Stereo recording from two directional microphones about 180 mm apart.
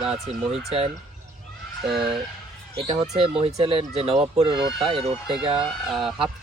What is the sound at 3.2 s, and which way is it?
Speech, 30° right (ahead or behind).